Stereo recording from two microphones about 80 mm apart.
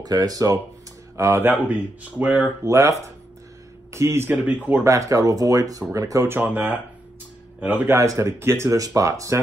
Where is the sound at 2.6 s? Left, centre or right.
Right.